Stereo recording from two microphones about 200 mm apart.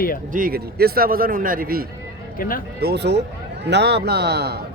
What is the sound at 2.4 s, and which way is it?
Speech, 45° left (ahead or behind).